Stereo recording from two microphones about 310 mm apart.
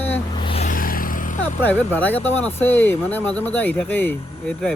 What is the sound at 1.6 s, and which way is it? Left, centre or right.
Speech, centre.